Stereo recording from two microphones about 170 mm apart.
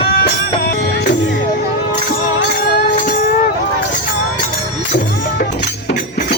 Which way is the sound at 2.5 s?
55° left (ahead or behind).